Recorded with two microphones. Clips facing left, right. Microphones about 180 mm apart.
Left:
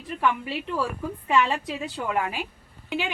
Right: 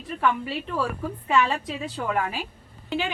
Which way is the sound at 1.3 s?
15° left (ahead or behind).